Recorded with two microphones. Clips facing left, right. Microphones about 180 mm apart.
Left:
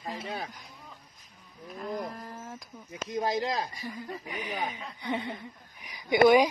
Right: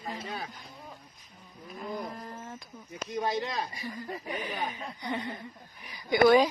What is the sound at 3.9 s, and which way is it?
Speech, 15° left (ahead or behind).